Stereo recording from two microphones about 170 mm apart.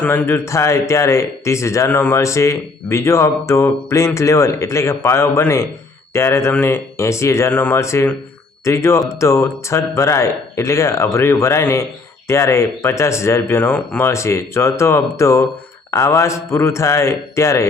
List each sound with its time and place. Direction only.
0.0 s speech: 10° left (ahead or behind)